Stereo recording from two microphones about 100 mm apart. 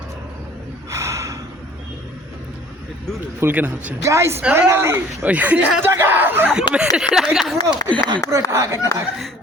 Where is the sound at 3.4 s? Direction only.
20° right (ahead or behind).